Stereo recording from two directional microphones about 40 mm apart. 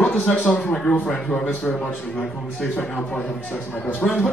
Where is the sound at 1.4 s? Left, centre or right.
Left.